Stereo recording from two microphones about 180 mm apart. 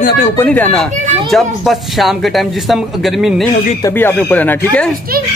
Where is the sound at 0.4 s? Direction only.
10° left (ahead or behind).